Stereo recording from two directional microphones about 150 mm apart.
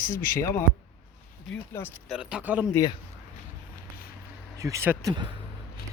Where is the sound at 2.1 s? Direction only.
5° right (ahead or behind).